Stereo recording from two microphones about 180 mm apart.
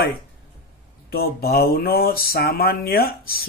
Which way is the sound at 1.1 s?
55° left (ahead or behind).